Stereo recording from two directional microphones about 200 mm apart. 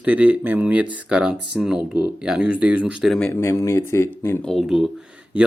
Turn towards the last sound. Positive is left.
turn(degrees=-5)  # may be behind; listen again after turning